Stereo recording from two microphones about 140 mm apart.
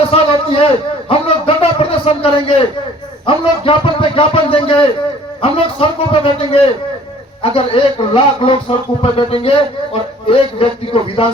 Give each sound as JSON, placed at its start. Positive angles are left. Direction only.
{"t": 0.1, "sound": "a man's voice", "side_deg": 40}